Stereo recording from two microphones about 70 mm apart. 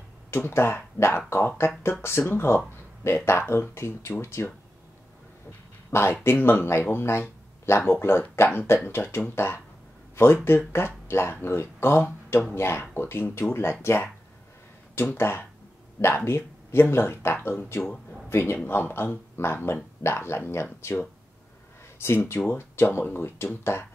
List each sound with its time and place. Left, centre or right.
0.3 s speech: left
5.9 s speech: left